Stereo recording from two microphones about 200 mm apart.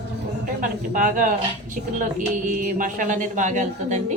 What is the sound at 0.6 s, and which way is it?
Speech, 40° right (ahead or behind).